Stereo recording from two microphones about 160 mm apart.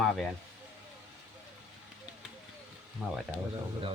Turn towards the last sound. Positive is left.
turn(degrees=0)  # may be behind; listen again after turning